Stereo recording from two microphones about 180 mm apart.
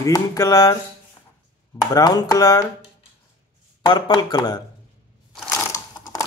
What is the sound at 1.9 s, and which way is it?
Speech, 20° left (ahead or behind).